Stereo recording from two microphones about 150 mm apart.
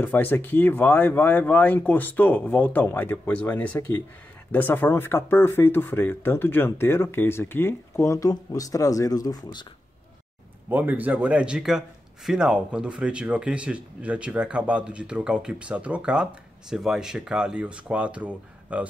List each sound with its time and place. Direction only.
0.0 s speech: 15° left (ahead or behind)
10.7 s speech: 10° right (ahead or behind)